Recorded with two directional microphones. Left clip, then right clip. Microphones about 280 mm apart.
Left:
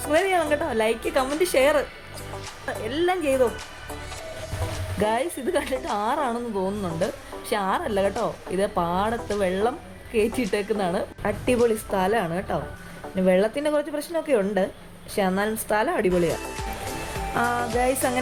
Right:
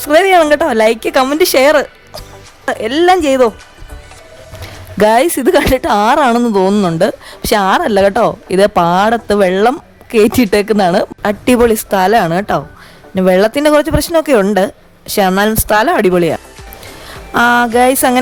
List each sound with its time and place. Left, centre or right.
0.0 s speech: right
4.9 s speech: right
17.3 s speech: right